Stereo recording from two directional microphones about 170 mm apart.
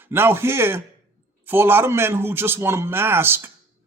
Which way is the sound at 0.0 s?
15° right (ahead or behind).